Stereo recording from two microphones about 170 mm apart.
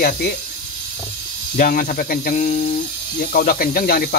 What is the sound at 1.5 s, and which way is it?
Speech, 55° left (ahead or behind).